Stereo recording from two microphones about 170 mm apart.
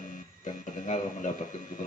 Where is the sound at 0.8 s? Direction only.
45° left (ahead or behind).